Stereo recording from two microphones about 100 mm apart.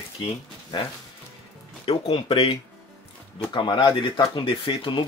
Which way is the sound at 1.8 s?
65° left (ahead or behind).